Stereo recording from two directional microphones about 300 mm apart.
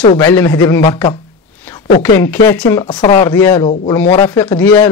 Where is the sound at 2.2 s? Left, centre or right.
Centre.